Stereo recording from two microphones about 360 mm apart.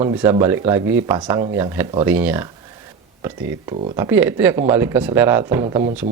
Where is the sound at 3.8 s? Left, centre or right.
Centre.